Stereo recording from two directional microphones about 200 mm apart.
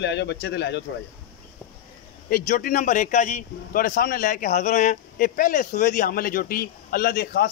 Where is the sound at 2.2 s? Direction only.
45° left (ahead or behind).